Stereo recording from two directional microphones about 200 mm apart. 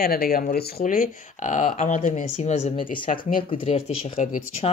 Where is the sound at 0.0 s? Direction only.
50° left (ahead or behind); by 3.1 s 25° left (ahead or behind).